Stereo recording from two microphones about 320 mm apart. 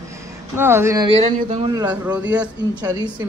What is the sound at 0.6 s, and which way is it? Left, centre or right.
Speech, centre.